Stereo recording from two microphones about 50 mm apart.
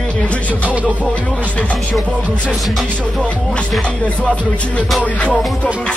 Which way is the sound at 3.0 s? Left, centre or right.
Left.